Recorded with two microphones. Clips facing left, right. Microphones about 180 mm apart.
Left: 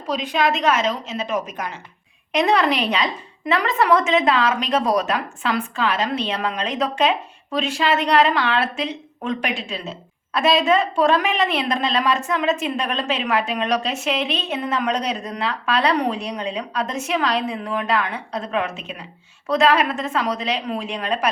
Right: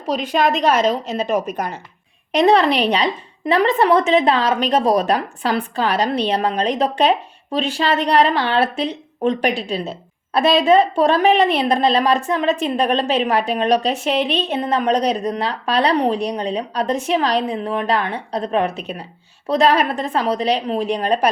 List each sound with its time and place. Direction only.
0.3 s a woman's voice: 40° right (ahead or behind)